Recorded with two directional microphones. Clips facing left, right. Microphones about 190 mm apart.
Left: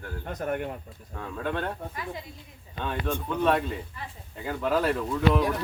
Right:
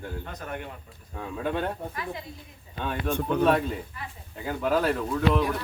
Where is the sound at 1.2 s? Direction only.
10° right (ahead or behind).